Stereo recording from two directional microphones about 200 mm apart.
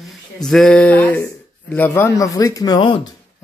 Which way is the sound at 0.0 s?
Centre (ahead or behind).